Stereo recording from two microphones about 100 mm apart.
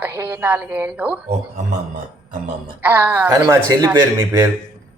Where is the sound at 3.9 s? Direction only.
30° right (ahead or behind).